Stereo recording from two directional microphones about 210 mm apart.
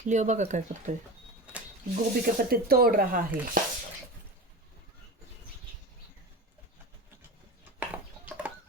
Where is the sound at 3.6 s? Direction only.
40° right (ahead or behind).